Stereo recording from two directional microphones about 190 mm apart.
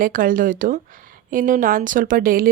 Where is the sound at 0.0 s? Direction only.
45° right (ahead or behind).